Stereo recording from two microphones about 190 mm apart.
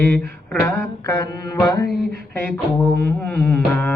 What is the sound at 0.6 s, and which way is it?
Mantra, 10° left (ahead or behind).